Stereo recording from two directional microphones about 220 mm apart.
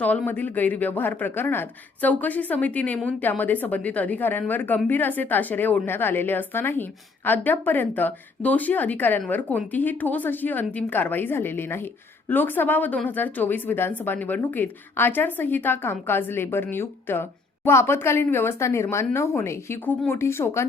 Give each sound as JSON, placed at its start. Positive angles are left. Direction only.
{"t": 0.0, "sound": "a woman's voice", "side_deg": 5}